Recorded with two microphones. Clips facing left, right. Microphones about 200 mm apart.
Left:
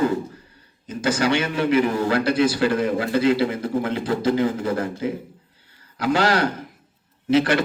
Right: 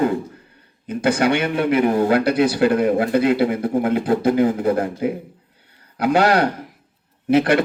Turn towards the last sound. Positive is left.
turn(degrees=-55)  # may be behind; listen again after turning